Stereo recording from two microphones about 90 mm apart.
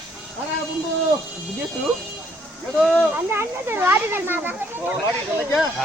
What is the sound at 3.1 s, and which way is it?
Speech, 30° right (ahead or behind).